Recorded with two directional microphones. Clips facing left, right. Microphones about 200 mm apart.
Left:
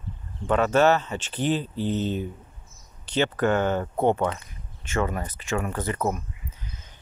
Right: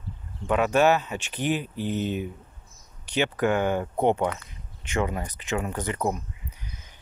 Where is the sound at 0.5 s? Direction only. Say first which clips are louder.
Left 1 dB; 10° right (ahead or behind).